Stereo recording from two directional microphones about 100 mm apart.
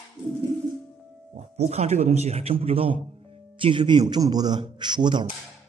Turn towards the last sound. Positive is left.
turn(degrees=-50)  # may be behind; listen again after turning